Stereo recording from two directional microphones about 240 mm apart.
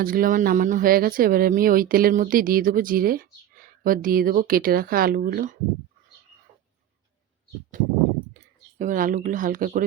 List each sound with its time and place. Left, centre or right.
0.0 s speech: right
8.8 s speech: right